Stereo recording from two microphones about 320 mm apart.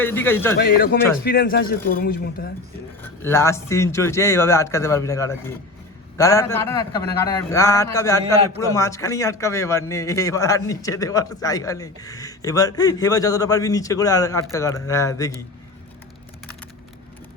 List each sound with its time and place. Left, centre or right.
0.0 s a man's voice: centre
0.6 s a man's voice: left
3.0 s a man's voice: centre